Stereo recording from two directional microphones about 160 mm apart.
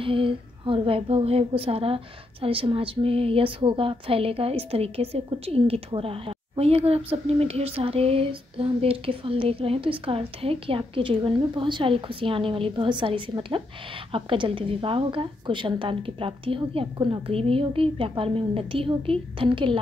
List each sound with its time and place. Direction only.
0.0 s speech: 35° right (ahead or behind)